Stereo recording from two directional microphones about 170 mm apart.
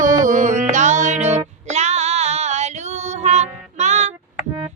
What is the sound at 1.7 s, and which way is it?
Female singing, 40° right (ahead or behind).